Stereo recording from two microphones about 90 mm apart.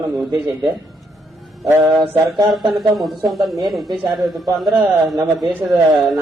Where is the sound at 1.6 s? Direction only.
35° right (ahead or behind).